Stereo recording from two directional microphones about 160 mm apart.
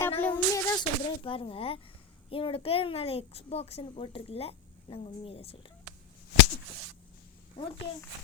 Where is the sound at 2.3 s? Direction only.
35° left (ahead or behind).